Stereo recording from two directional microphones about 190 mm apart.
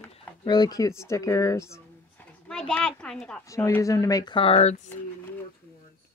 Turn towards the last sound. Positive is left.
turn(degrees=30)  # may be behind; listen again after turning